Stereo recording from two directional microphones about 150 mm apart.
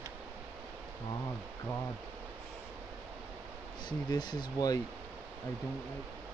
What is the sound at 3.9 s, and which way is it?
Speech, 30° left (ahead or behind).